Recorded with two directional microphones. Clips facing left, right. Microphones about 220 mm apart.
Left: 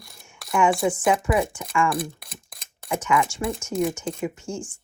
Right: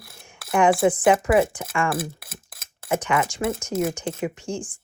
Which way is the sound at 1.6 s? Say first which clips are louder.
Left 1 dB; 5° right (ahead or behind).